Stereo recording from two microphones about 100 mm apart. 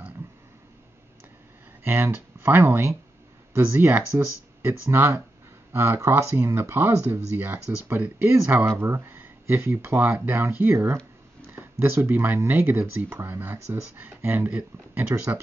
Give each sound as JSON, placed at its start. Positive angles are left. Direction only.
{"t": 1.9, "sound": "speech", "side_deg": -20}